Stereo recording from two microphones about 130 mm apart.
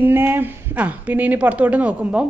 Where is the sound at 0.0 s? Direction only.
15° right (ahead or behind).